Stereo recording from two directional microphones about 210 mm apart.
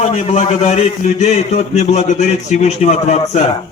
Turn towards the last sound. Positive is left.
turn(degrees=35)  # may be behind; listen again after turning